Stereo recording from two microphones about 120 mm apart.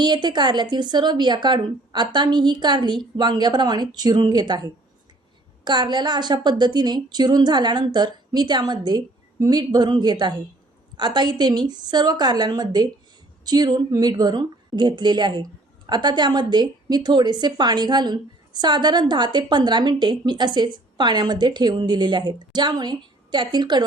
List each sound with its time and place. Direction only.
0.0 s a woman's voice: 40° right (ahead or behind)